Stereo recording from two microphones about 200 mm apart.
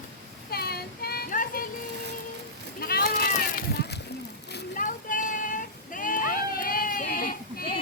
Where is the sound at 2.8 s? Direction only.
50° left (ahead or behind).